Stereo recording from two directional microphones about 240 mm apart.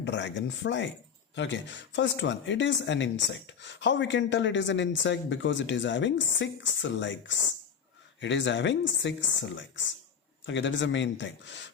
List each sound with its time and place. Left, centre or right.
0.0 s speech: left